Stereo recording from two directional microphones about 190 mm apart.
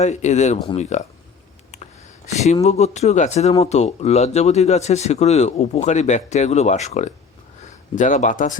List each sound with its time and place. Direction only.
0.0 s speech: 40° left (ahead or behind)
2.6 s speech: 35° left (ahead or behind)